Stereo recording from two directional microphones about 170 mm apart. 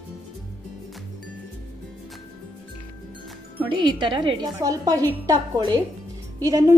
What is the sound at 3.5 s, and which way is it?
Speech, 30° right (ahead or behind).